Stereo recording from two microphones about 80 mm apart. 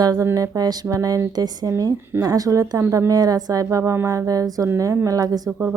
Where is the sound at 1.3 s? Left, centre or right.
Right.